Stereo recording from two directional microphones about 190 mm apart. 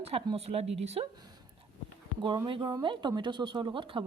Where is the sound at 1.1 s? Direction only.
20° right (ahead or behind).